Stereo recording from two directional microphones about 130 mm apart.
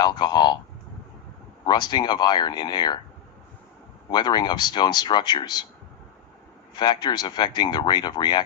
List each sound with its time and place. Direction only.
0.0 s speech: 35° left (ahead or behind)
1.6 s speech: 35° left (ahead or behind)
4.1 s speech: 30° left (ahead or behind)
6.7 s speech: 35° left (ahead or behind)